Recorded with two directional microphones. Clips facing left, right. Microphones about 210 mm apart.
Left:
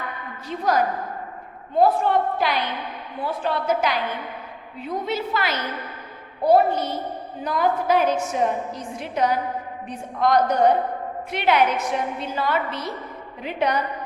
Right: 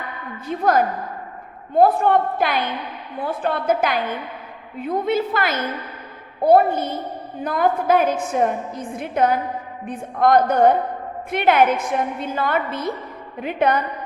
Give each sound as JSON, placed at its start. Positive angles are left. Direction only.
{"t": 0.4, "sound": "a woman's voice", "side_deg": -55}